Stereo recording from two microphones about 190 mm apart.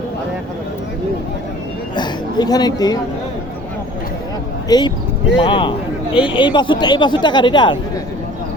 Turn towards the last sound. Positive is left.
turn(degrees=25)  # may be behind; listen again after turning